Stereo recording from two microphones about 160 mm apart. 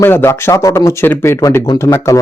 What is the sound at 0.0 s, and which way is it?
Speech, 15° left (ahead or behind).